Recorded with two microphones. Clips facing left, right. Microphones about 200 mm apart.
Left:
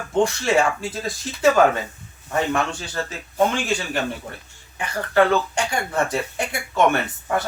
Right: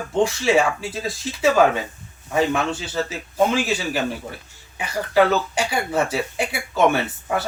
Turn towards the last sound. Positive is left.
turn(degrees=-5)  # may be behind; listen again after turning